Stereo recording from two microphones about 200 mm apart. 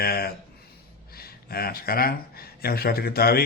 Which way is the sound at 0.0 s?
50° left (ahead or behind).